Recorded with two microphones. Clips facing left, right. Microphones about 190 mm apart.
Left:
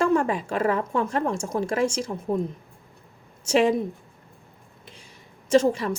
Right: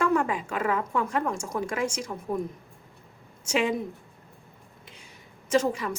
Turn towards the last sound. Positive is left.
turn(degrees=30)  # may be behind; listen again after turning